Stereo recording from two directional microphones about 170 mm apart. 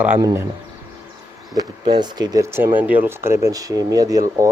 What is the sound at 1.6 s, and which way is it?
Speech, 25° right (ahead or behind).